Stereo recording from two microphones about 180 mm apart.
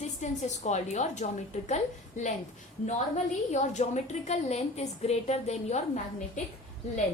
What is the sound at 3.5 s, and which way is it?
A woman's voice, 40° left (ahead or behind).